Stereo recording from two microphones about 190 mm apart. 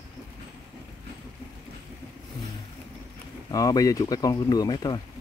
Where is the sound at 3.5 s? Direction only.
20° left (ahead or behind).